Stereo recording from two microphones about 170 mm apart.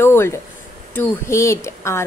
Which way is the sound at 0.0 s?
15° left (ahead or behind).